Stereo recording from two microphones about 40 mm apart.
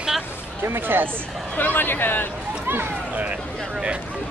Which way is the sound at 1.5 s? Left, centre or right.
Left.